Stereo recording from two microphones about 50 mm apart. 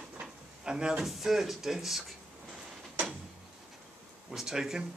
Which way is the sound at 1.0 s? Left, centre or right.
Centre.